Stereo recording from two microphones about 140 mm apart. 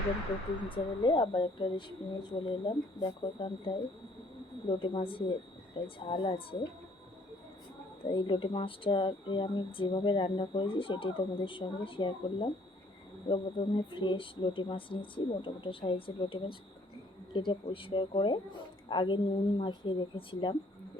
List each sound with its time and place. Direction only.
0.7 s speech: 35° left (ahead or behind)
4.8 s speech: 40° left (ahead or behind)
8.1 s speech: 35° left (ahead or behind)